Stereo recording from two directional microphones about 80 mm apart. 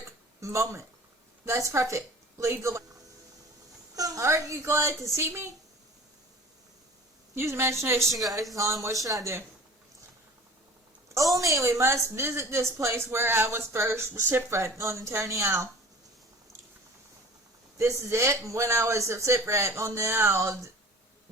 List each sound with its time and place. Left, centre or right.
0.3 s a woman's voice: right
3.9 s speech: right
7.3 s speech: right
8.0 s speech: centre
8.5 s speech: right
11.1 s speech: right
17.7 s speech: right